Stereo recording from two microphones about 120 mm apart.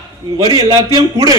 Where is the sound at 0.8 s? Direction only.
30° right (ahead or behind).